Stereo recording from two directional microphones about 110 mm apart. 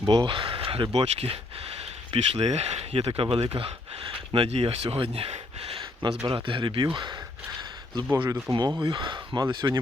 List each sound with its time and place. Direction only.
0.0 s speech: 45° right (ahead or behind); by 1.4 s 65° right (ahead or behind)
2.1 s speech: 75° right (ahead or behind); by 3.7 s 60° right (ahead or behind)
4.3 s speech: 70° right (ahead or behind)
6.2 s speech: 50° right (ahead or behind)
8.3 s speech: 35° right (ahead or behind)